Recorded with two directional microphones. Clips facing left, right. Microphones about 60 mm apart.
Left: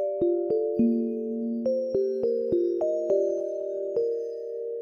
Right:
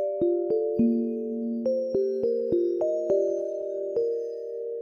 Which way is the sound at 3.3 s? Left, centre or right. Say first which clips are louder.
Even; left.